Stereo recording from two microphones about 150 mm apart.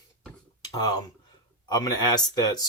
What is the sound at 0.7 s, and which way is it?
Speech, 25° left (ahead or behind).